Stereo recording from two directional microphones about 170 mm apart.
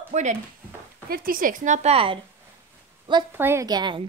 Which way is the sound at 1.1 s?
55° right (ahead or behind).